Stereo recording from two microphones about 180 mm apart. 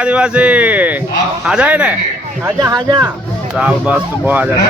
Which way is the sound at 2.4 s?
20° right (ahead or behind).